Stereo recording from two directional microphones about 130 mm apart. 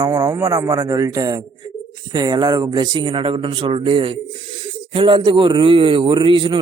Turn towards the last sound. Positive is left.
turn(degrees=-40)  # may be behind; listen again after turning